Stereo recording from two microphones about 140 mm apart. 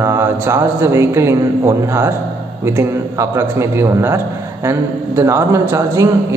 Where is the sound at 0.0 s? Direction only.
20° right (ahead or behind).